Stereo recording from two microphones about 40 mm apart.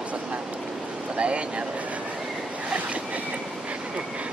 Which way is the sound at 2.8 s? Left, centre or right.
Right.